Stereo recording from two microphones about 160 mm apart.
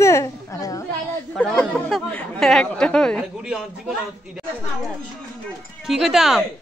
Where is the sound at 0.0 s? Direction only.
20° left (ahead or behind).